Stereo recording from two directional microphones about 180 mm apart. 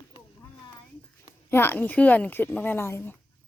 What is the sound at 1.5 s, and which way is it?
Speech, 10° left (ahead or behind).